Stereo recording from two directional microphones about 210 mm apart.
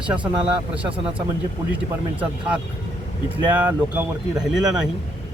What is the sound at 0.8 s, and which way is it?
Speech, 25° right (ahead or behind).